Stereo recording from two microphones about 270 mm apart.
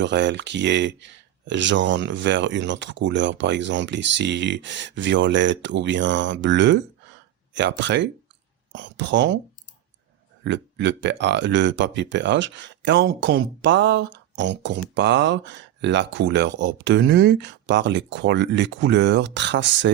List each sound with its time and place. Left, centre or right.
0.0 s speech: right
10.4 s speech: right